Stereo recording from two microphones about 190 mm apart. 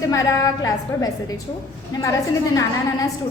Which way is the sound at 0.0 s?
15° left (ahead or behind).